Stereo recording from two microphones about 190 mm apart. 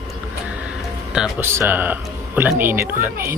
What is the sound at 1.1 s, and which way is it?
Speech, 10° right (ahead or behind).